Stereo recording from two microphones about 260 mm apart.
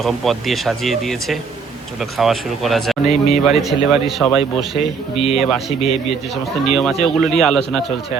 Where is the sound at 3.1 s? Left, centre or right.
Left.